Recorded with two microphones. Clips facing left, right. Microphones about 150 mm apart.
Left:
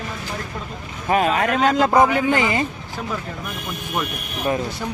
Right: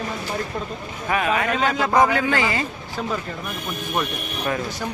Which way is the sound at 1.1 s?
35° left (ahead or behind).